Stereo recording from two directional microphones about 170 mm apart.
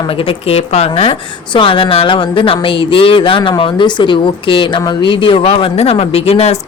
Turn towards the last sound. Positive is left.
turn(degrees=35)  # may be behind; listen again after turning